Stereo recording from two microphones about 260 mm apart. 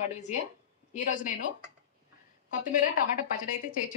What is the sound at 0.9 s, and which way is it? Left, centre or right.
Speech, left.